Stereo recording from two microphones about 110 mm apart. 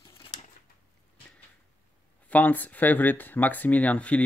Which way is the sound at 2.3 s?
15° left (ahead or behind).